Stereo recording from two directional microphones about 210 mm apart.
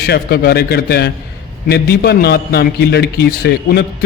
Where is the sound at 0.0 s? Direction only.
50° left (ahead or behind).